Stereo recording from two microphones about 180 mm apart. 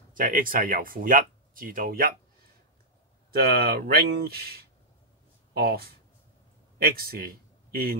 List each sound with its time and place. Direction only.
0.1 s speech: 50° right (ahead or behind)
3.3 s a man's voice: 60° right (ahead or behind)